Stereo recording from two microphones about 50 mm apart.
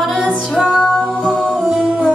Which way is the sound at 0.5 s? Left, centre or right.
Centre.